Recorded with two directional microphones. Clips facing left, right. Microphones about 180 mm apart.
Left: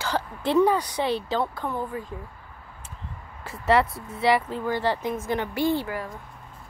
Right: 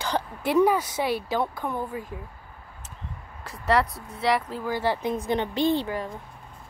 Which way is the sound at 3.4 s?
Centre (ahead or behind).